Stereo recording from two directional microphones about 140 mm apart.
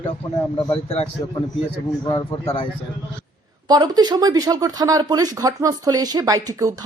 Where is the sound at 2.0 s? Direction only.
35° left (ahead or behind).